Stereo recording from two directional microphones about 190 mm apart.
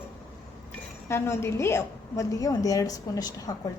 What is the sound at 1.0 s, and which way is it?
A woman's voice, 15° left (ahead or behind).